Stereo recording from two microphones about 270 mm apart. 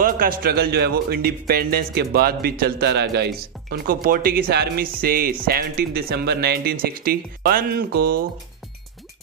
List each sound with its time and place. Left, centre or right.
0.0 s speech: right